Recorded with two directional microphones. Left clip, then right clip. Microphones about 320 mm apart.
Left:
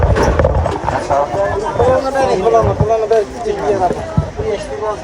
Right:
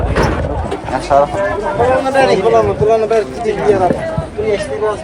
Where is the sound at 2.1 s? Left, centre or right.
Right.